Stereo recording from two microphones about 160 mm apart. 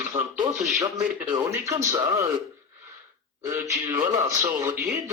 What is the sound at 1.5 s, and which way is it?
Speech, 20° right (ahead or behind).